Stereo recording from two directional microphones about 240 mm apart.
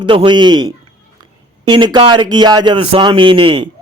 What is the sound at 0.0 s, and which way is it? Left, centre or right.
A man's voice, right.